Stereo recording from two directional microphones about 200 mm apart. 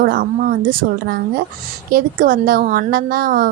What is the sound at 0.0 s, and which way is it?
A woman's voice, 45° right (ahead or behind).